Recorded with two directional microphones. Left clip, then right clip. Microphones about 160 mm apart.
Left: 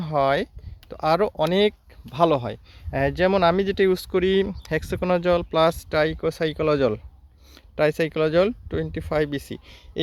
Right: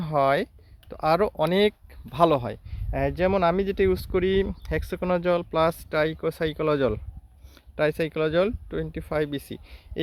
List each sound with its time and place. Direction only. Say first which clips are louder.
0.0 s speech: left 1 dB; 5° left (ahead or behind)